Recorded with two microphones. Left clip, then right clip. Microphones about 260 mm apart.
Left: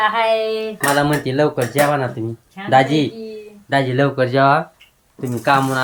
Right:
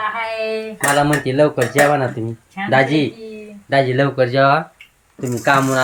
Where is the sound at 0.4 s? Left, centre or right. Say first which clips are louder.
Left 1 dB; left.